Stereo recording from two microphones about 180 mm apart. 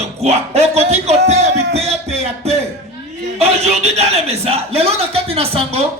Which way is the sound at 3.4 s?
35° right (ahead or behind).